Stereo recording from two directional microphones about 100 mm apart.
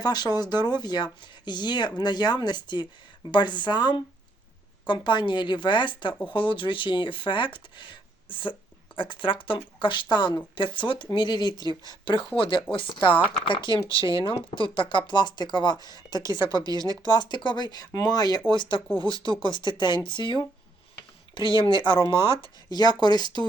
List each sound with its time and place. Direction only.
0.0 s speech: 45° left (ahead or behind)
11.6 s speech: 45° right (ahead or behind)
11.9 s speech: 55° left (ahead or behind)
13.8 s speech: 35° right (ahead or behind)
14.1 s speech: 60° left (ahead or behind)
16.1 s speech: 30° right (ahead or behind)
17.2 s speech: 50° left (ahead or behind)
23.0 s speech: 45° left (ahead or behind)